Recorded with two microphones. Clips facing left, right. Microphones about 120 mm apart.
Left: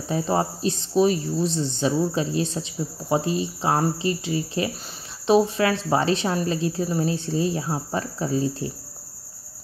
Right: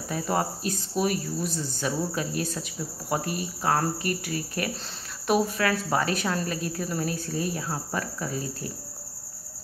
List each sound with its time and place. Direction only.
0.1 s speech: 25° left (ahead or behind)